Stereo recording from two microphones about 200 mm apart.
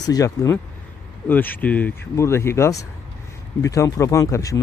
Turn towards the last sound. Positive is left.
turn(degrees=15)  # may be behind; listen again after turning